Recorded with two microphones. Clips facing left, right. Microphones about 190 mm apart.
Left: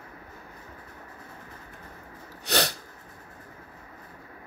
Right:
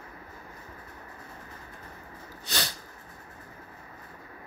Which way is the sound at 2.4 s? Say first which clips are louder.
Left 8 dB; 70° left (ahead or behind).